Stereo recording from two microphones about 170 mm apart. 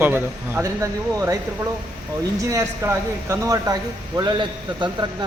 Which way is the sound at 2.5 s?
15° right (ahead or behind).